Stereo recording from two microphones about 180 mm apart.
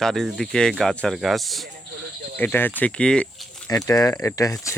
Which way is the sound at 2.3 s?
10° left (ahead or behind).